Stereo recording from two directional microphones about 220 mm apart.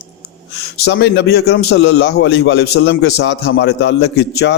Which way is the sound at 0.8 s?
50° left (ahead or behind).